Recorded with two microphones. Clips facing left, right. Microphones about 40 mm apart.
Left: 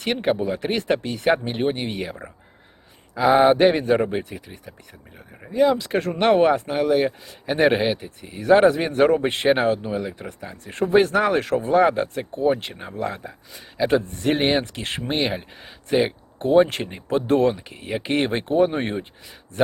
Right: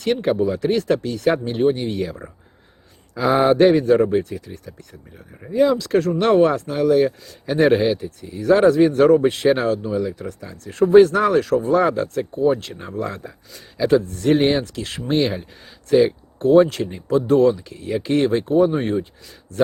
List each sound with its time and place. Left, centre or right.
0.0 s speech: left
3.2 s speech: centre
5.5 s speech: centre
5.7 s speech: left
8.4 s speech: left
11.7 s speech: centre
12.9 s speech: centre
16.6 s speech: left